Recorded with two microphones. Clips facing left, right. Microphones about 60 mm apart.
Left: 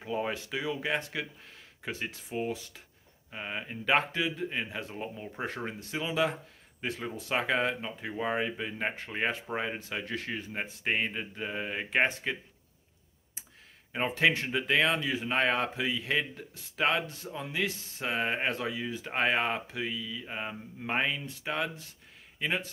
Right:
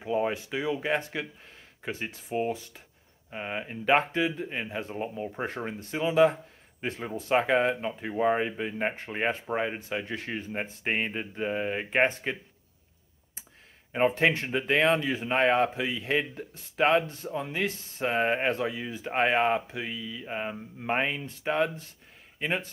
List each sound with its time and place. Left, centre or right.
0.0 s speech: centre
0.3 s speech: right
3.3 s speech: centre
13.9 s speech: right
20.2 s mantra: centre
20.9 s speech: right